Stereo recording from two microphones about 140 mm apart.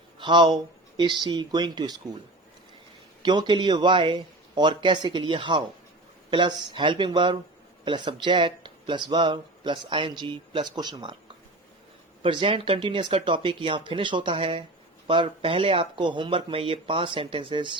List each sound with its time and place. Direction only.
0.2 s speech: 35° right (ahead or behind)
3.2 s speech: 30° right (ahead or behind)
12.2 s speech: 40° right (ahead or behind)